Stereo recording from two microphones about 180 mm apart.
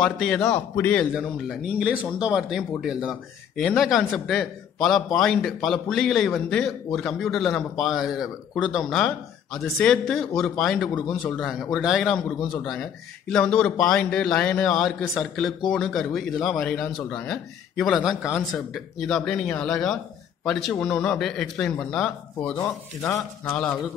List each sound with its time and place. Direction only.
0.0 s a man's voice: 5° left (ahead or behind)
1.1 s speech: centre (ahead or behind)
22.6 s a man's voice: 15° left (ahead or behind)
23.5 s speech: 5° left (ahead or behind)